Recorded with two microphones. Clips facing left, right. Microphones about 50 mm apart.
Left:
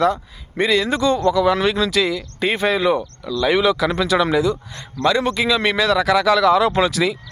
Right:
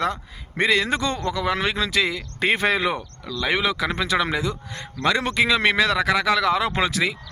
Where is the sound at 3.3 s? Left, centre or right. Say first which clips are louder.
Left 6 dB; right.